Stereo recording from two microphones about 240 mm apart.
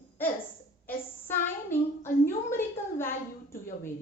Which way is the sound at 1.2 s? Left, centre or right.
Centre.